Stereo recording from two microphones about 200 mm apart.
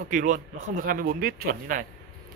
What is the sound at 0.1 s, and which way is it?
Speech, 40° right (ahead or behind).